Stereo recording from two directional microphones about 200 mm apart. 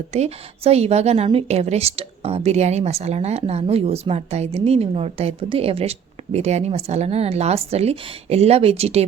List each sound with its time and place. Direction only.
0.1 s a woman's voice: 30° right (ahead or behind)